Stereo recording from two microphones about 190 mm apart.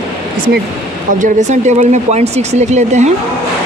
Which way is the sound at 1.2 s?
40° right (ahead or behind).